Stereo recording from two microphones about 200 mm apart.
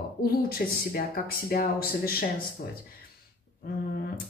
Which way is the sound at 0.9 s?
45° left (ahead or behind).